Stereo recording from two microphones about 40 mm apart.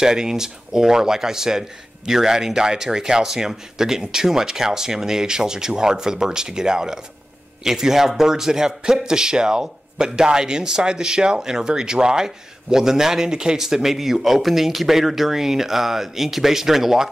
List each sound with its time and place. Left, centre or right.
0.0 s speech: centre